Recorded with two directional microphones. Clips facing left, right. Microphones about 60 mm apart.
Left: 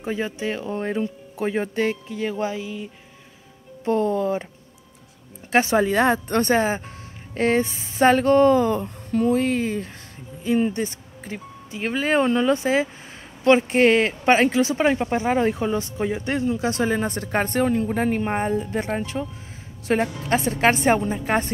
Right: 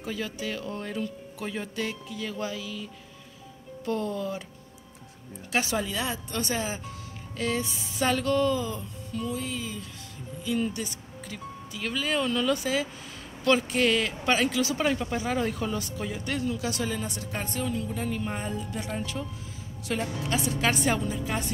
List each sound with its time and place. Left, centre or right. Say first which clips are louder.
0.0 s speech: left 7 dB; left
5.5 s speech: left 10 dB; left